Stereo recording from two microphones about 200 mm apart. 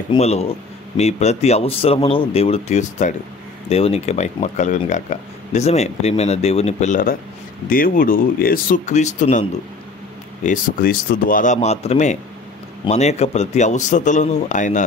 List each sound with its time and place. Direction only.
0.1 s speech: 30° left (ahead or behind)